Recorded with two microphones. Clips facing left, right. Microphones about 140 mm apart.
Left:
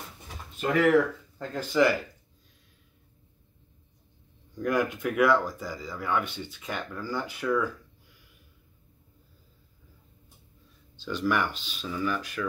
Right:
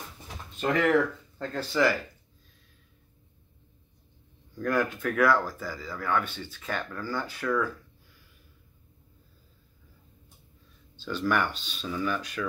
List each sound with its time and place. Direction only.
0.6 s speech: 5° left (ahead or behind)
4.6 s speech: 15° left (ahead or behind)
11.1 s speech: 10° left (ahead or behind)